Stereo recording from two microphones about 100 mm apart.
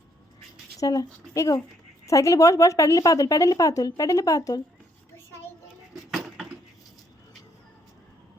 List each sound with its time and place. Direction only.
0.8 s a woman's voice: 35° left (ahead or behind)
5.9 s keys jangling: centre (ahead or behind)